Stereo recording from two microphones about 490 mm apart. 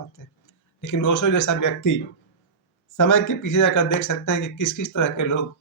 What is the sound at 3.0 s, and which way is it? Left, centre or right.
Speech, left.